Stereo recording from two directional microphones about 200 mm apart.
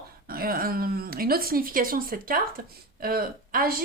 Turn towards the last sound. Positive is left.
turn(degrees=-45)  # may be behind; listen again after turning